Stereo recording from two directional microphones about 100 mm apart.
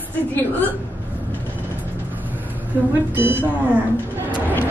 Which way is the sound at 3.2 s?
20° right (ahead or behind).